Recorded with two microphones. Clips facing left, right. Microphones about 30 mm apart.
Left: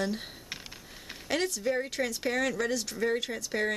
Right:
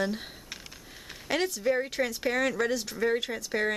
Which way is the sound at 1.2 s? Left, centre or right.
Centre.